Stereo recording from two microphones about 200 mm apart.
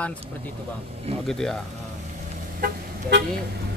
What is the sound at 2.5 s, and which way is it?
Vehicle, 50° right (ahead or behind).